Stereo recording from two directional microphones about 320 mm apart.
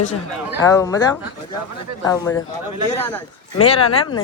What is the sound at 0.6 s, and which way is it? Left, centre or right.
Speech, centre.